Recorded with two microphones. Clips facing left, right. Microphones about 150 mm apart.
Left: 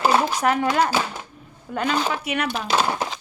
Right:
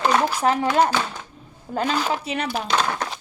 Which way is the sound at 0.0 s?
10° left (ahead or behind).